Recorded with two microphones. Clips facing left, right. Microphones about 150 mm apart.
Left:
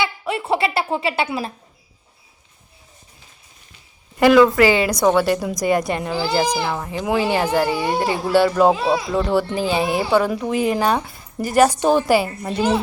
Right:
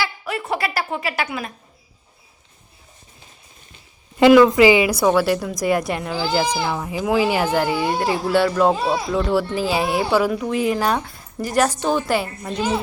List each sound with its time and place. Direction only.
0.0 s speech: 25° left (ahead or behind)
4.2 s a woman's voice: 20° right (ahead or behind); by 6.4 s centre (ahead or behind)
6.4 s speech: 10° left (ahead or behind)
6.7 s a woman's voice: 5° right (ahead or behind)
11.7 s a woman's voice: 15° left (ahead or behind)